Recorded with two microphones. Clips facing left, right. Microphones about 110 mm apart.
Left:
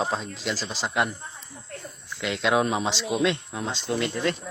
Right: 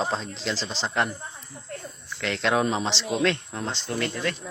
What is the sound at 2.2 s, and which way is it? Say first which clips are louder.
Speech: left 1 dB; 10° left (ahead or behind).